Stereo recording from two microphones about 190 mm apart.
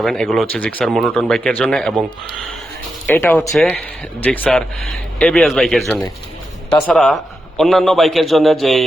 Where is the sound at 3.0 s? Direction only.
10° left (ahead or behind).